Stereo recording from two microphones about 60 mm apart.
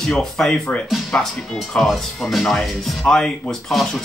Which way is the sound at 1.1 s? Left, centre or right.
Centre.